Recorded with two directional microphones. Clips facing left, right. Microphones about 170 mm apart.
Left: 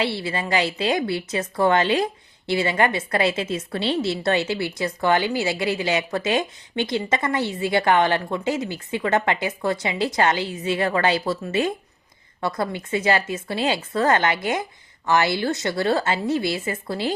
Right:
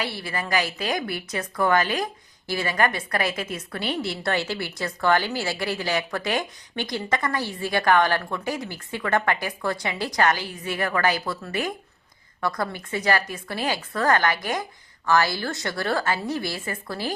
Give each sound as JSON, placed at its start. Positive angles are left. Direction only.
{"t": 0.0, "sound": "a woman's voice", "side_deg": 25}